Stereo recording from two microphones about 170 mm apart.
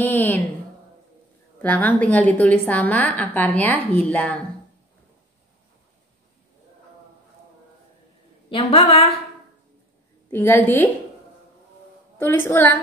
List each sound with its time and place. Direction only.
0.0 s a woman's voice: 10° left (ahead or behind)
1.6 s a woman's voice: 10° left (ahead or behind)
8.5 s a woman's voice: 35° left (ahead or behind)
10.3 s a woman's voice: 10° left (ahead or behind)
12.2 s a woman's voice: 10° left (ahead or behind)